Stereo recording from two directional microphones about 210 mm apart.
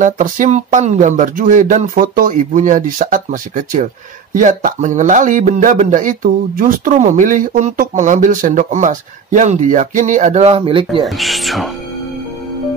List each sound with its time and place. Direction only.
0.0 s speech: 40° right (ahead or behind)
11.1 s speech: centre (ahead or behind)